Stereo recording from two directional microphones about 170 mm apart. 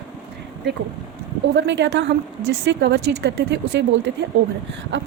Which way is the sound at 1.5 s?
90° right.